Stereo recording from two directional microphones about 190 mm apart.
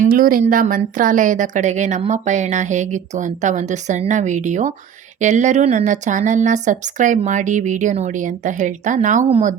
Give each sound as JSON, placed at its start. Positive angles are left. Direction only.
{"t": 0.0, "sound": "a woman's voice", "side_deg": -45}